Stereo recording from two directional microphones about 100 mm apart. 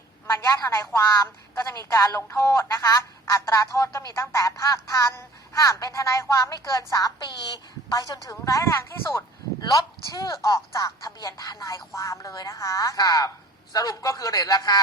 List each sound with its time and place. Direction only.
0.3 s a woman's voice: 30° left (ahead or behind)